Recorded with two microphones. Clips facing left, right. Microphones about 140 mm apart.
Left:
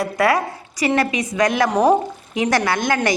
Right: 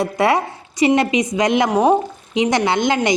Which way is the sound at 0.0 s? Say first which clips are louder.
Right 1 dB; 25° right (ahead or behind).